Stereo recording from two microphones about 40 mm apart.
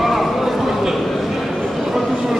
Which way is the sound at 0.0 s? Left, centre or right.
Centre.